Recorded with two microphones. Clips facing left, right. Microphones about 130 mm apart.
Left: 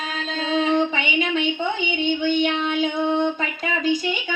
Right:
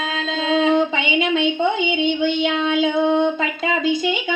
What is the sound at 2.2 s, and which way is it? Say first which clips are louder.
Child singing: right 2 dB; 25° right (ahead or behind).